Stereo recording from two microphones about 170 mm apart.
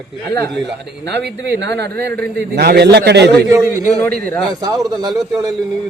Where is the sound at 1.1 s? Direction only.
85° right.